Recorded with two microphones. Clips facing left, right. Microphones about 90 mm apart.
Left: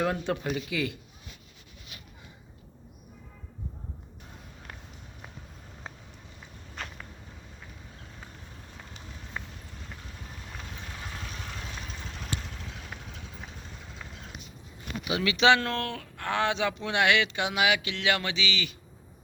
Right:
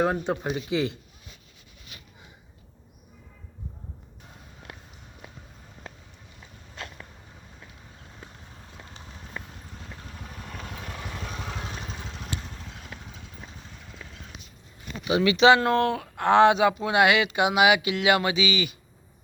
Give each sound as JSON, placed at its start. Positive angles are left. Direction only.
{"t": 0.0, "sound": "speech", "side_deg": -25}
{"t": 15.1, "sound": "speech", "side_deg": -5}
{"t": 15.6, "sound": "speech", "side_deg": -20}